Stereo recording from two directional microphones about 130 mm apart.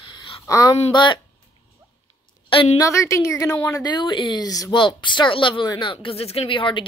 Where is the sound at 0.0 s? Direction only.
40° left (ahead or behind).